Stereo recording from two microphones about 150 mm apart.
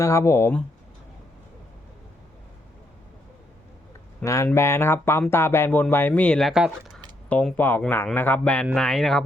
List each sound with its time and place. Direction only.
0.0 s speech: 20° left (ahead or behind)
4.2 s speech: 20° left (ahead or behind); by 7.0 s centre (ahead or behind)
7.3 s speech: 10° left (ahead or behind)